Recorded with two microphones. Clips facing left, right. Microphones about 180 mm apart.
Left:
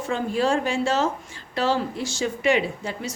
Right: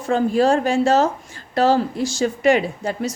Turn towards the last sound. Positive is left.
turn(degrees=-40)  # may be behind; listen again after turning